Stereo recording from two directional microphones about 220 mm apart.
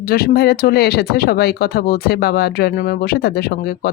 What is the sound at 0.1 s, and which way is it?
Speech, 45° left (ahead or behind).